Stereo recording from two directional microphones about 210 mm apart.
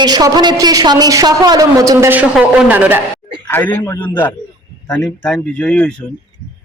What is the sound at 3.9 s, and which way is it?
Speech, 20° left (ahead or behind).